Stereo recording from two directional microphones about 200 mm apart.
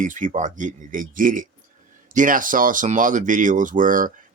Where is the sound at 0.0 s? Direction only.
40° right (ahead or behind).